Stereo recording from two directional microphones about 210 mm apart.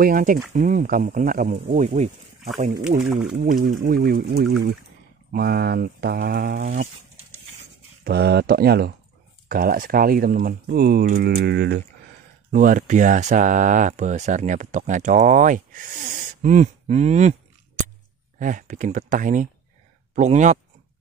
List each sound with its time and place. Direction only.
0.0 s speech: 40° right (ahead or behind)
3.3 s speech: 40° right (ahead or behind)
6.6 s speech: 35° right (ahead or behind)
8.0 s speech: 50° right (ahead or behind)
12.4 s speech: 40° right (ahead or behind)